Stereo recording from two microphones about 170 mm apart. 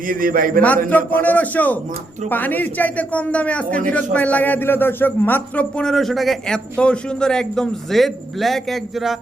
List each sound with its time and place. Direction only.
0.1 s a man's voice: 55° right (ahead or behind)
0.9 s a man's voice: 10° left (ahead or behind)